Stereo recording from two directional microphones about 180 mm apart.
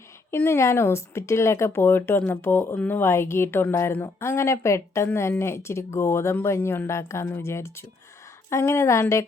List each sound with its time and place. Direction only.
0.3 s speech: 15° left (ahead or behind)